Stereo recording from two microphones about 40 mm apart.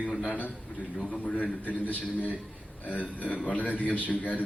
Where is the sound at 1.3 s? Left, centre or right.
Left.